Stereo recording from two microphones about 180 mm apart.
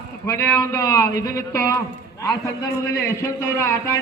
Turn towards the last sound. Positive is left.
turn(degrees=15)  # may be behind; listen again after turning